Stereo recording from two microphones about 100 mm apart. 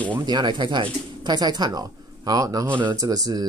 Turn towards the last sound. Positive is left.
turn(degrees=-40)  # may be behind; listen again after turning